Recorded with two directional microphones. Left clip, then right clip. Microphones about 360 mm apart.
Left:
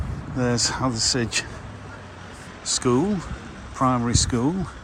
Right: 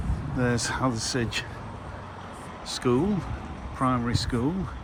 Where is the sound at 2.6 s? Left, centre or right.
Centre.